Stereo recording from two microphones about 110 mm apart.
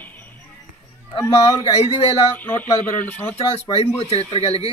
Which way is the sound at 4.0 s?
60° left (ahead or behind).